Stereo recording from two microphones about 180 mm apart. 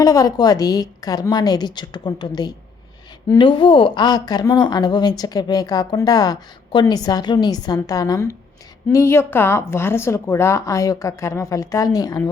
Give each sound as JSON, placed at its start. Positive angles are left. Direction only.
{"t": 0.0, "sound": "a woman's voice", "side_deg": 20}